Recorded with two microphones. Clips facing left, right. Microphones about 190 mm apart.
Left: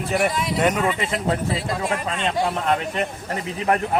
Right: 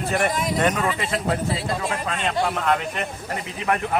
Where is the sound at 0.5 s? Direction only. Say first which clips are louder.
Left 3 dB; 15° left (ahead or behind).